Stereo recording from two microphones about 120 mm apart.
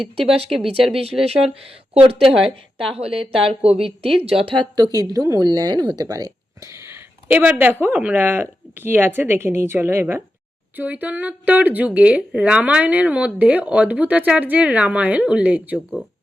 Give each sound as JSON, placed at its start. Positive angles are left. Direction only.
{"t": 0.0, "sound": "speech", "side_deg": -55}